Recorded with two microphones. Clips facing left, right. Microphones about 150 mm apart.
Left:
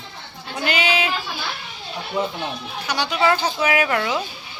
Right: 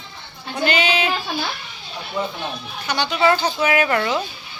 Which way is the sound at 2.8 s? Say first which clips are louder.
Right 2 dB; 5° left (ahead or behind).